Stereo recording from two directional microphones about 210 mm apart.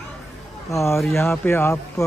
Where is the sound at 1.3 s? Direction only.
10° left (ahead or behind).